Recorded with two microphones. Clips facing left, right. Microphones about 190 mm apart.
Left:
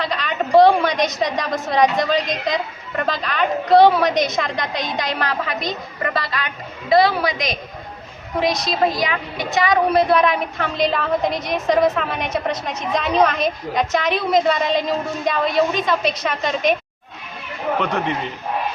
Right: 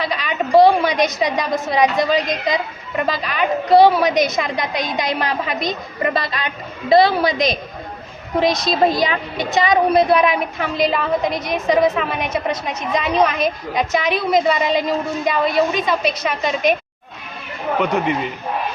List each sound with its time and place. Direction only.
0.0 s a woman's voice: 5° right (ahead or behind)